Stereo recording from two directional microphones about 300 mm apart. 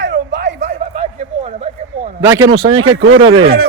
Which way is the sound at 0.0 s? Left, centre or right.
Right.